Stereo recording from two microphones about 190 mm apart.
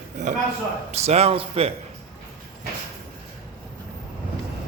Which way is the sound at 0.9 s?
35° right (ahead or behind).